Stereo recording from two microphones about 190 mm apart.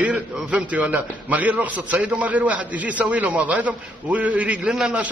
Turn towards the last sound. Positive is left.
turn(degrees=-5)  # may be behind; listen again after turning